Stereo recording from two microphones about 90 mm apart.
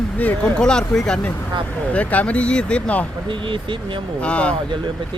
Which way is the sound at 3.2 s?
65° right (ahead or behind).